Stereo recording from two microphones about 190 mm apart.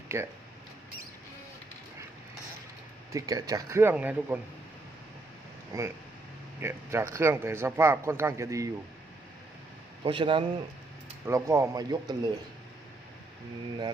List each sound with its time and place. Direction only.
0.1 s a man's voice: 15° right (ahead or behind)
3.1 s a man's voice: 20° right (ahead or behind)
5.7 s a man's voice: 15° right (ahead or behind)
10.0 s speech: 25° right (ahead or behind)
11.3 s a man's voice: 15° right (ahead or behind)